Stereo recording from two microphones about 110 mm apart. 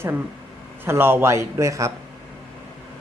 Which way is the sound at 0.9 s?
20° right (ahead or behind).